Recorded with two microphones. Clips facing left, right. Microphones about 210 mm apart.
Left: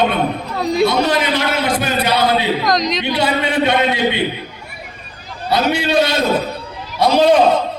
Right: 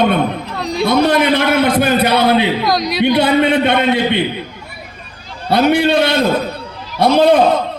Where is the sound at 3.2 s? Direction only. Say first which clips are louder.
Right 3 dB; 55° right (ahead or behind).